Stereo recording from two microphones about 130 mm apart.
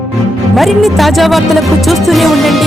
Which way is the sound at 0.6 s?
Centre (ahead or behind).